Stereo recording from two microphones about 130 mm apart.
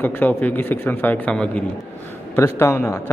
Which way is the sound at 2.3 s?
20° left (ahead or behind).